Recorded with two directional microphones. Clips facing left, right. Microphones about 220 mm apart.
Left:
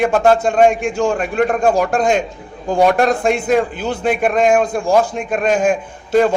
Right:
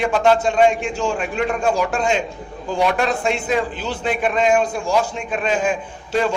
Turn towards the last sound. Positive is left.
turn(degrees=55)  # may be behind; listen again after turning